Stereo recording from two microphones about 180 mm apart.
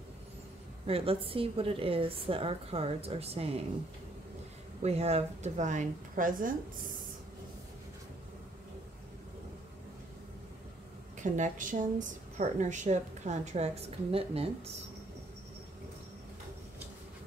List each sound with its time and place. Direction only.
0.8 s a woman's voice: 30° right (ahead or behind)
4.8 s a woman's voice: 35° right (ahead or behind)
11.1 s a woman's voice: 45° right (ahead or behind)